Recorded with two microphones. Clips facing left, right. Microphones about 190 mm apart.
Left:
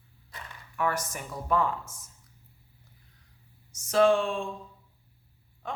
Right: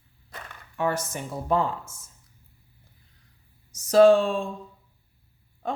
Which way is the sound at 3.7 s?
35° right (ahead or behind).